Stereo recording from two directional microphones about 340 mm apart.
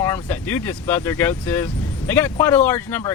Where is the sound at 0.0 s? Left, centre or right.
Centre.